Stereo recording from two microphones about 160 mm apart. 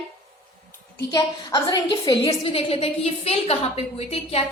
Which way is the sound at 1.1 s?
25° left (ahead or behind).